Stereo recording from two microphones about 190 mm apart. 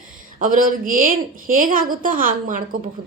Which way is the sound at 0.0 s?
45° right (ahead or behind).